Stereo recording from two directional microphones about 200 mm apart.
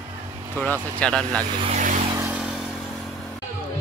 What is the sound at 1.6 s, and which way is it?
Speech, 40° right (ahead or behind).